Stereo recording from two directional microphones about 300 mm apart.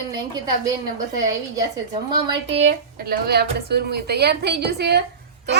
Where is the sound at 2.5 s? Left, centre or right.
Right.